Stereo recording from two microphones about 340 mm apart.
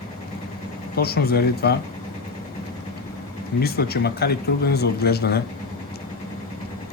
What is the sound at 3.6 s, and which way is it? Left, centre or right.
Speech, left.